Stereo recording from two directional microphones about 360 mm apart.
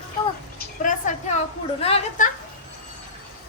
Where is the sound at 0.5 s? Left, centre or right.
Left.